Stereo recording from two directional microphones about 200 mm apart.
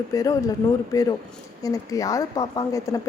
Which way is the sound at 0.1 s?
15° left (ahead or behind).